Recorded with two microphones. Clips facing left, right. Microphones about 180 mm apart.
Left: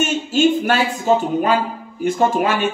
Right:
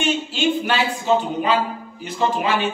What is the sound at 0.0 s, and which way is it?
Speech, 45° left (ahead or behind).